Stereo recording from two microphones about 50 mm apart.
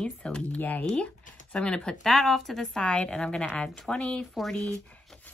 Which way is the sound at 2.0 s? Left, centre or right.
Centre.